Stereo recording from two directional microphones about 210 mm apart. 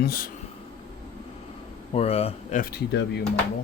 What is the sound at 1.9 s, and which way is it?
Speech, 30° left (ahead or behind).